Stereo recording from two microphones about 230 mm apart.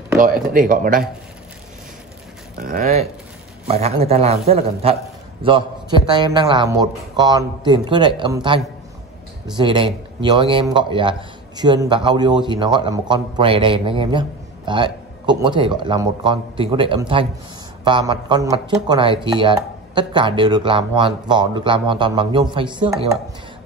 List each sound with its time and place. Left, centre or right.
0.2 s speech: right
2.5 s speech: right; by 8.5 s centre
9.6 s speech: right